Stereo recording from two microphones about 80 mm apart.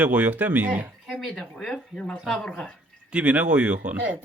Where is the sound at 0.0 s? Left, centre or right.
Right.